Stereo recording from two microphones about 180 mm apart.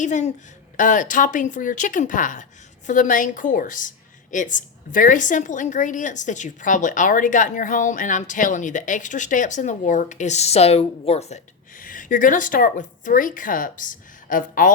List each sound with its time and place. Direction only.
0.0 s a child's voice: 40° left (ahead or behind)